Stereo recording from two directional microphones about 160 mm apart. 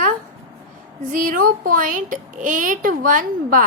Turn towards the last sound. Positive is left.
turn(degrees=-60)  # may be behind; listen again after turning